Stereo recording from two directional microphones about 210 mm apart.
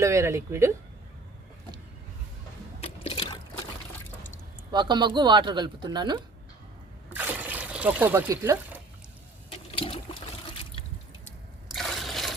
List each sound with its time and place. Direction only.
0.0 s speech: 15° right (ahead or behind)
2.8 s water: 25° left (ahead or behind)
4.7 s speech: 20° right (ahead or behind)
7.1 s water: 10° right (ahead or behind)
9.7 s water: 25° left (ahead or behind)
11.3 s a sound: centre (ahead or behind)